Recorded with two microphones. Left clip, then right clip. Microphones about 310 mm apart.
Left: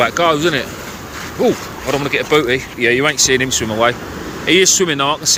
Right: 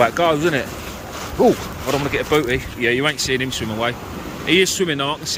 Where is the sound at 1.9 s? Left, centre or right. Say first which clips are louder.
Left 4 dB; centre.